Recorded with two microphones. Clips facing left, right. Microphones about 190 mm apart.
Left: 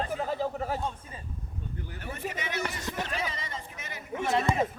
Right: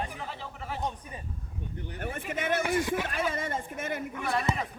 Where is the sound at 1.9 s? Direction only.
50° right (ahead or behind).